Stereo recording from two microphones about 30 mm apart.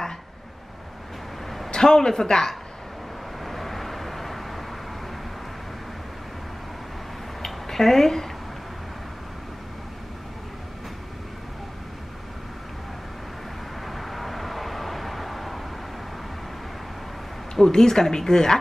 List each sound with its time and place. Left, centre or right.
1.7 s a woman's voice: left
3.4 s vehicle: centre
7.4 s a sound: centre
13.8 s vehicle: centre
17.6 s a woman's voice: centre